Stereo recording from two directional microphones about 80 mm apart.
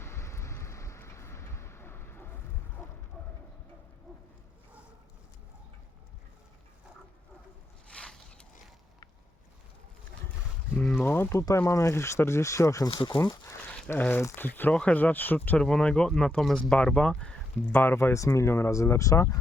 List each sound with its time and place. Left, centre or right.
0.0 s vehicle: left
7.9 s a sound: centre
11.0 s speech: left
12.9 s speech: left
13.7 s a sound: centre
14.3 s speech: left
15.5 s speech: centre
17.7 s speech: left